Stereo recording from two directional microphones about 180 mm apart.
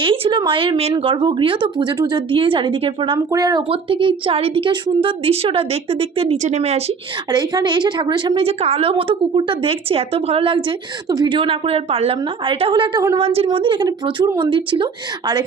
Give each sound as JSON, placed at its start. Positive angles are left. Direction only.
{"t": 0.0, "sound": "a woman's voice", "side_deg": -25}
{"t": 7.3, "sound": "a woman's voice", "side_deg": -20}
{"t": 13.1, "sound": "a woman's voice", "side_deg": -30}